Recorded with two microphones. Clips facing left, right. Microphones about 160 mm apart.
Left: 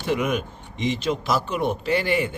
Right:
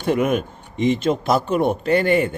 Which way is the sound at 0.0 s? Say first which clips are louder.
Right 5 dB; 45° right (ahead or behind).